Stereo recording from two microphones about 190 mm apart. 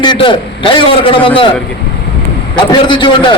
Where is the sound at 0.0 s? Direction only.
25° left (ahead or behind).